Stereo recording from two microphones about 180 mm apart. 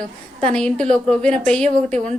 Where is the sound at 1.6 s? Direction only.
40° right (ahead or behind).